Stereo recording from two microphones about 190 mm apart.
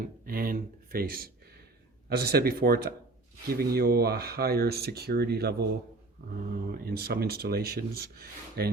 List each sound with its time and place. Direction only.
0.3 s speech: 50° right (ahead or behind)
6.7 s speech: 50° right (ahead or behind)